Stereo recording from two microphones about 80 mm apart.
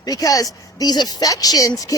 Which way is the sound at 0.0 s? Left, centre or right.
Left.